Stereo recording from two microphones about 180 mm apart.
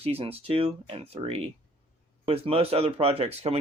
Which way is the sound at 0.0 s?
35° right (ahead or behind).